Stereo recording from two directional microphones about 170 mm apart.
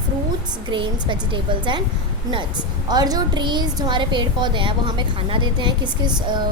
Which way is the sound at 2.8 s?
25° right (ahead or behind).